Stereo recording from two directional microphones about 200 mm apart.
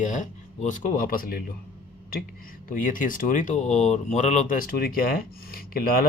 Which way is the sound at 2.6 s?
40° left (ahead or behind).